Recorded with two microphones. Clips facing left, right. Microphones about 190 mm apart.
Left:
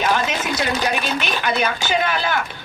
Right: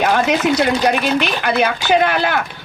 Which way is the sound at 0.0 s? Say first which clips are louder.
Right 5 dB; 60° right (ahead or behind).